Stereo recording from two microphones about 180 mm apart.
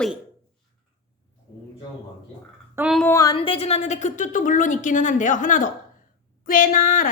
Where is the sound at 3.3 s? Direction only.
30° left (ahead or behind).